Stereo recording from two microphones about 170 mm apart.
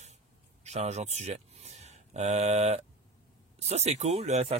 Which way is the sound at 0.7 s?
40° right (ahead or behind).